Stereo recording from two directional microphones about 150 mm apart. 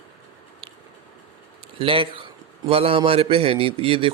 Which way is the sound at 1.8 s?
35° right (ahead or behind).